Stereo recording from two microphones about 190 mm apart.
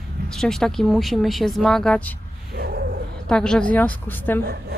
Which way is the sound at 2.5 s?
55° right (ahead or behind).